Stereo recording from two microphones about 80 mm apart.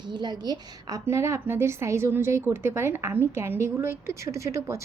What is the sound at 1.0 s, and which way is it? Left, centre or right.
A woman's voice, right.